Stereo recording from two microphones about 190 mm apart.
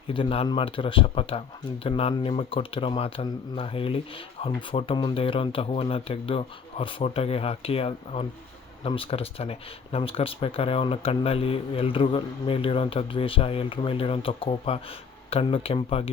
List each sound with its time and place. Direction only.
0.1 s speech: 30° left (ahead or behind)